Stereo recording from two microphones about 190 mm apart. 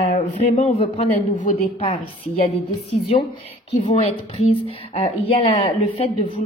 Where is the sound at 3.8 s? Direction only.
30° left (ahead or behind).